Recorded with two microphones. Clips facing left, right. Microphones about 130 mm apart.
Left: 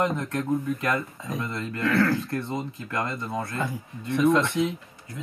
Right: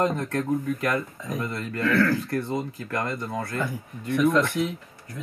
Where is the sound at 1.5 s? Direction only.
25° left (ahead or behind).